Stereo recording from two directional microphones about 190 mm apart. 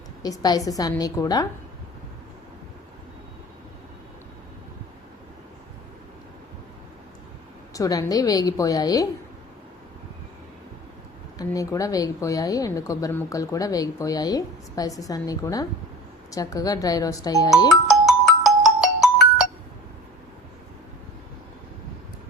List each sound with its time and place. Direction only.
0.2 s a woman's voice: 20° left (ahead or behind)
7.7 s a woman's voice: 20° left (ahead or behind)
11.3 s a woman's voice: 20° left (ahead or behind)
17.7 s music: centre (ahead or behind)